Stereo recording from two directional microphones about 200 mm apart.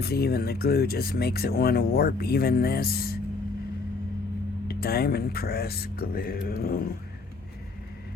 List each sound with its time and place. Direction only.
0.0 s speech: 50° left (ahead or behind)
4.7 s speech: 50° left (ahead or behind)